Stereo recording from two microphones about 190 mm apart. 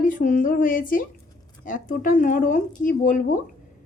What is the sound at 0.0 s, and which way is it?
A woman's voice, 45° left (ahead or behind).